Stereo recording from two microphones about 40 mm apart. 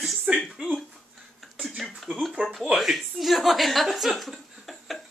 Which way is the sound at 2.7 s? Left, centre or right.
Centre.